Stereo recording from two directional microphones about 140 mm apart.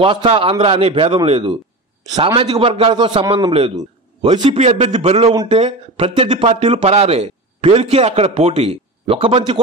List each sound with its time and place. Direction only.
0.0 s a man's voice: 40° right (ahead or behind)
2.3 s a man's voice: 40° right (ahead or behind)
5.3 s a man's voice: 30° right (ahead or behind)
5.6 s speech: 45° right (ahead or behind)